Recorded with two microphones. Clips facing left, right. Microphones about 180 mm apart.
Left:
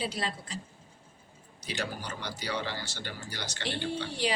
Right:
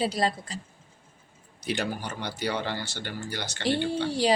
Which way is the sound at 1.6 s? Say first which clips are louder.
Right 6 dB; 60° right (ahead or behind).